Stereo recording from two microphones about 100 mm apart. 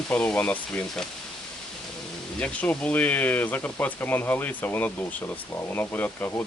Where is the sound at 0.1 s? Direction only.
15° left (ahead or behind).